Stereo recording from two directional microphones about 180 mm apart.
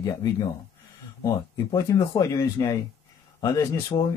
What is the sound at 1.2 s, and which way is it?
Speech, 20° left (ahead or behind).